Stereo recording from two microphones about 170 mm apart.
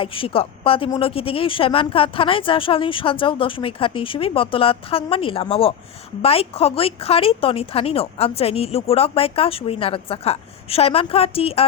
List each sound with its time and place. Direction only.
0.0 s a woman's voice: 30° left (ahead or behind)